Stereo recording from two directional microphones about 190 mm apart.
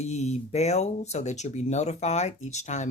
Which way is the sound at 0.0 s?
35° left (ahead or behind).